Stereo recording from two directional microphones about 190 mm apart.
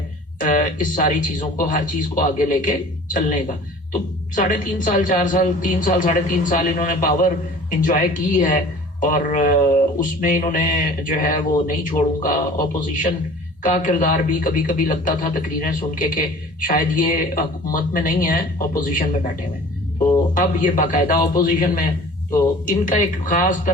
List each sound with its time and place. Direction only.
0.3 s a man's voice: 45° left (ahead or behind)
13.6 s a man's voice: 45° left (ahead or behind)
20.3 s a man's voice: 45° left (ahead or behind)